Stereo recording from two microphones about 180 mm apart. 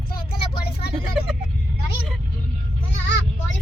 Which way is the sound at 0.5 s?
60° left (ahead or behind).